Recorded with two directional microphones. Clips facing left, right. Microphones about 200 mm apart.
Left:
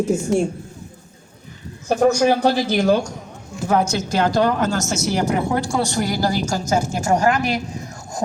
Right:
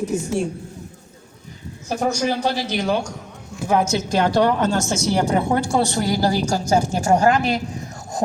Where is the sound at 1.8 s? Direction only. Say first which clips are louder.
Left 6 dB; 55° left (ahead or behind).